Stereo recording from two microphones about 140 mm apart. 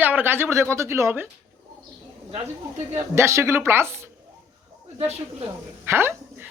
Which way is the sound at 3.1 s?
20° right (ahead or behind).